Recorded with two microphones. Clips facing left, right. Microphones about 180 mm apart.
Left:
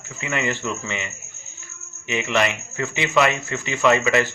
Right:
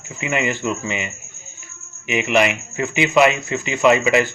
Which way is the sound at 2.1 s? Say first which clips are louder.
Right 4 dB; 15° right (ahead or behind).